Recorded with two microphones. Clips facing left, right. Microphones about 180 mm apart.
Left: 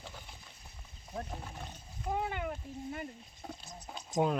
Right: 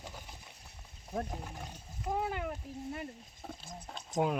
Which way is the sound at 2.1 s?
Centre (ahead or behind).